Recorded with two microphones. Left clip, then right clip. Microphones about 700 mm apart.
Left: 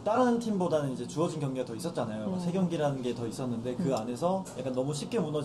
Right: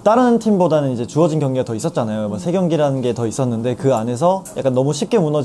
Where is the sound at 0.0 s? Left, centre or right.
Right.